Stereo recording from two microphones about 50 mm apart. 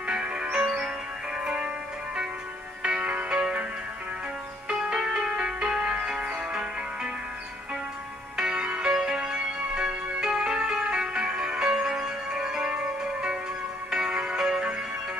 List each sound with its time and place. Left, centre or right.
0.1 s music: centre
2.8 s music: right
4.7 s music: centre
8.4 s music: centre